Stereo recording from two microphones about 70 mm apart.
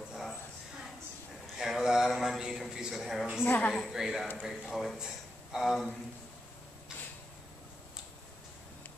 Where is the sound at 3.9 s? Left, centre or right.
Centre.